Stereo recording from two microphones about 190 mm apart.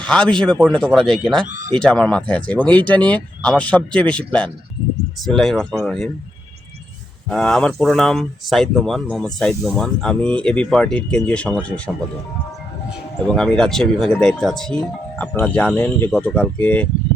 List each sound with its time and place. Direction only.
0.0 s speech: 5° left (ahead or behind)
1.5 s speech: 40° right (ahead or behind)
1.7 s speech: 5° left (ahead or behind)
7.3 s speech: 5° left (ahead or behind)
13.2 s speech: 5° left (ahead or behind)